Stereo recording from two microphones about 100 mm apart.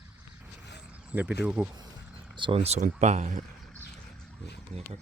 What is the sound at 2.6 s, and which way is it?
Speech, 90° right.